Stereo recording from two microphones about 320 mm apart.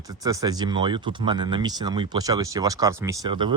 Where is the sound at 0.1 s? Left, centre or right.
Centre.